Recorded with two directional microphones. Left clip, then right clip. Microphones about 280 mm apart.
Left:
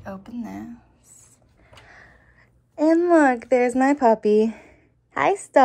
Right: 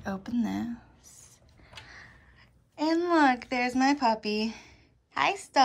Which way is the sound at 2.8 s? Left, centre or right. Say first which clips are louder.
Left 8 dB; centre.